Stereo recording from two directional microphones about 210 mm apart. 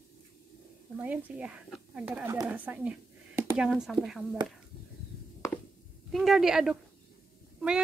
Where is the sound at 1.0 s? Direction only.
10° right (ahead or behind).